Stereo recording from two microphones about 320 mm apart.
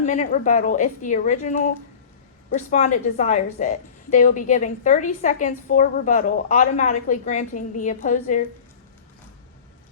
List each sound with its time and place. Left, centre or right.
0.0 s a woman's voice: left